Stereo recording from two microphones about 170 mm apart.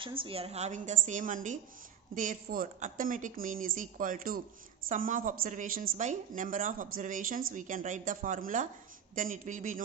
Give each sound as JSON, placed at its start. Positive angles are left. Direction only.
{"t": 0.0, "sound": "a woman's voice", "side_deg": -30}